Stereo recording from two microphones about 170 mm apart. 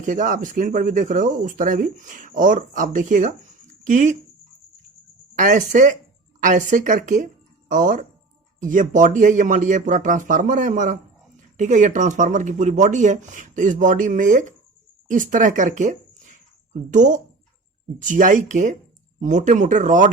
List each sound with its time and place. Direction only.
0.0 s speech: 50° right (ahead or behind)
5.3 s speech: 50° right (ahead or behind)